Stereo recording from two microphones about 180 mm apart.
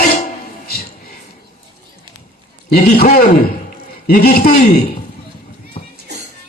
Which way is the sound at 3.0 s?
60° left (ahead or behind).